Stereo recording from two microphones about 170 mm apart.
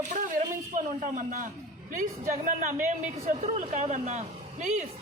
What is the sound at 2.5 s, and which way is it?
Speech, 50° right (ahead or behind).